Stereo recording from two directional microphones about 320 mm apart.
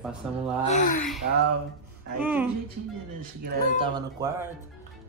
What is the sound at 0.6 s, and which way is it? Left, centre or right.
Speech, left.